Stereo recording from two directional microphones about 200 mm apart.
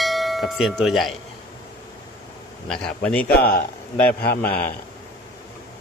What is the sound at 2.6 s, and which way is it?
Speech, 5° left (ahead or behind).